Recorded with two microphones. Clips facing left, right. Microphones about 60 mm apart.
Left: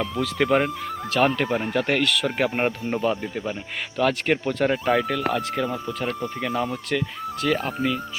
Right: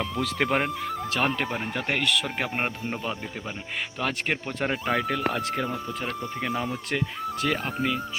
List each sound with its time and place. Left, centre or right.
0.4 s speech: centre
1.7 s speech: centre
3.9 s speech: centre
6.9 s speech: right
7.8 s speech: centre